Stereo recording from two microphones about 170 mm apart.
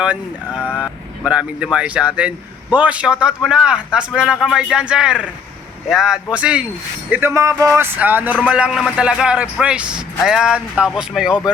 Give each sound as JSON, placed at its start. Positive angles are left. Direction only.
{"t": 0.0, "sound": "a man's voice", "side_deg": -5}